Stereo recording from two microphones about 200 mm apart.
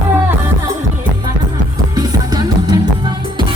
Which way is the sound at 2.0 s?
20° right (ahead or behind).